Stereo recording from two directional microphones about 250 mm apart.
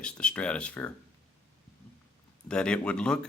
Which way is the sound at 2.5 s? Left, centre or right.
Centre.